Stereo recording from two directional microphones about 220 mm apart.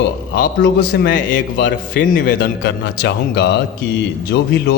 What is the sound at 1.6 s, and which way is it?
A man's voice, 50° left (ahead or behind).